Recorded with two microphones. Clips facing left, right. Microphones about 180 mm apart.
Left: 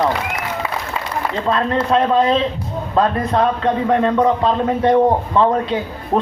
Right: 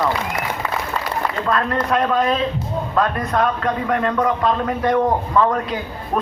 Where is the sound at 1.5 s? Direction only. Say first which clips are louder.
Left 3 dB; 25° left (ahead or behind).